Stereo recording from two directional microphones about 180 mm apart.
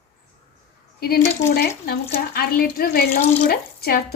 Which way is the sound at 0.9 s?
60° left (ahead or behind).